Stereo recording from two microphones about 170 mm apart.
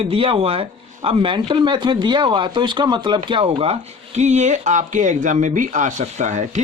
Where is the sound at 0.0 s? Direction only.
35° right (ahead or behind).